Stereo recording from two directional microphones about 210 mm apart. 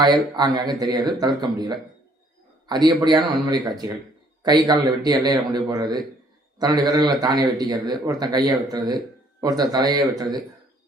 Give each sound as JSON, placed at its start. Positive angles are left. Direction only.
{"t": 0.0, "sound": "a man's voice", "side_deg": -20}